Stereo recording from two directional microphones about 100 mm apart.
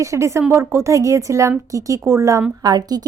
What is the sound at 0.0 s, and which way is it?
A woman's voice, 30° right (ahead or behind).